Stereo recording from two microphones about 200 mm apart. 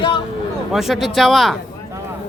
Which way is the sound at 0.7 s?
Centre (ahead or behind).